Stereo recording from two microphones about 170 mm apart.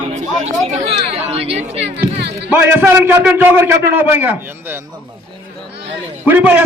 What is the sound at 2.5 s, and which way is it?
A man's voice, 10° right (ahead or behind).